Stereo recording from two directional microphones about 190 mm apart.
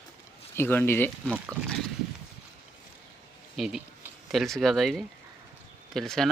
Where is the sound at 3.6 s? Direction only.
Centre (ahead or behind).